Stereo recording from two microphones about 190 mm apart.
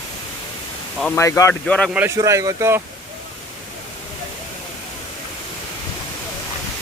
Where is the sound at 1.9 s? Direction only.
15° right (ahead or behind).